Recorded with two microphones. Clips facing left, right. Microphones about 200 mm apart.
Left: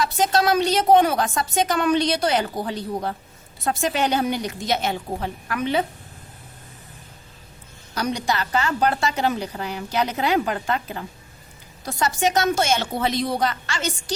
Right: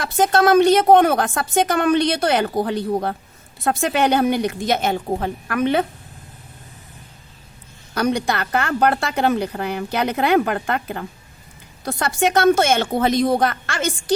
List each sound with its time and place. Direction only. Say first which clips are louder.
0.0 s a woman's voice: right 4 dB; 55° right (ahead or behind)
7.9 s a woman's voice: right 4 dB; 55° right (ahead or behind)